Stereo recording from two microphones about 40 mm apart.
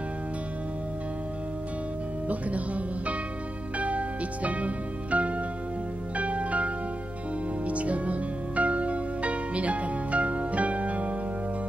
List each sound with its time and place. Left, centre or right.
2.2 s music: right